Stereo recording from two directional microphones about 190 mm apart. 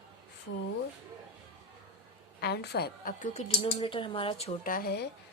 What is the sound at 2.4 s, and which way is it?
Speech, 60° left (ahead or behind).